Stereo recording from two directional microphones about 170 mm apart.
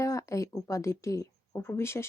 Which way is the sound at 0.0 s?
20° left (ahead or behind).